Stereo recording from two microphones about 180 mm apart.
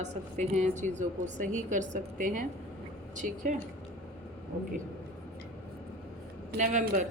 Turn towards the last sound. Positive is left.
turn(degrees=-45)  # may be behind; listen again after turning